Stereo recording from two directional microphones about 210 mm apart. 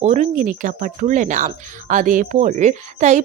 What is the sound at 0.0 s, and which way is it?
Speech, 35° right (ahead or behind).